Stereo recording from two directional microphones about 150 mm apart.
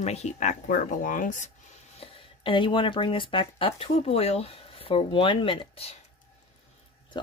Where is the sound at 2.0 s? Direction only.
35° left (ahead or behind).